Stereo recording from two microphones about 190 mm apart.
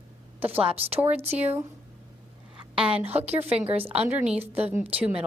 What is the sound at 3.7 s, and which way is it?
Speech, 30° right (ahead or behind).